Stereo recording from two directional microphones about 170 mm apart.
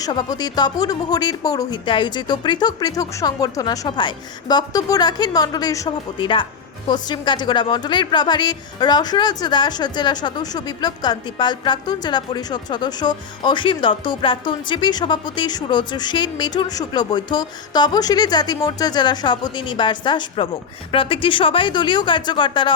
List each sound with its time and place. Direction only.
0.0 s a woman's voice: 25° left (ahead or behind)